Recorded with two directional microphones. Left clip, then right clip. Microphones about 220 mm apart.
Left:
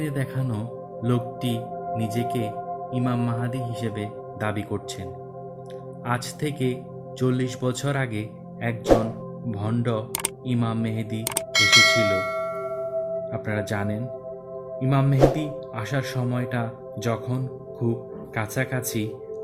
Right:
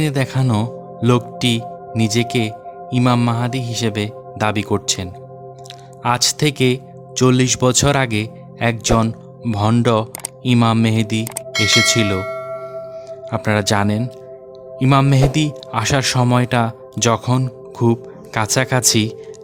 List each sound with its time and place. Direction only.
0.0 s speech: 50° right (ahead or behind)
11.3 s bell: centre (ahead or behind)
13.3 s speech: 55° right (ahead or behind)